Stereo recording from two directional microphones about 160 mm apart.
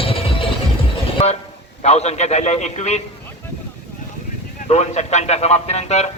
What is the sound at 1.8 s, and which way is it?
A man's voice, 45° left (ahead or behind).